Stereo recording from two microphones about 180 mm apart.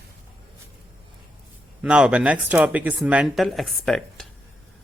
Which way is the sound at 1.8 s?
5° right (ahead or behind).